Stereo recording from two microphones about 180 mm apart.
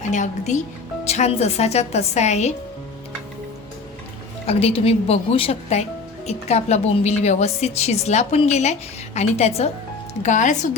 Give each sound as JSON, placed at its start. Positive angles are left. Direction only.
{"t": 0.1, "sound": "a woman's voice", "side_deg": 40}
{"t": 4.4, "sound": "a woman's voice", "side_deg": 35}